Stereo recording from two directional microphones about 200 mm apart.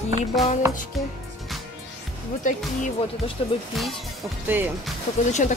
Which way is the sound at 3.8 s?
Centre (ahead or behind).